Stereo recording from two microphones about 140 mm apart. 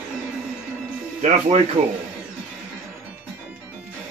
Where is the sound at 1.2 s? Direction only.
55° right (ahead or behind).